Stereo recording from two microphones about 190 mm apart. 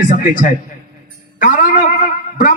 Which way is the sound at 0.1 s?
45° left (ahead or behind).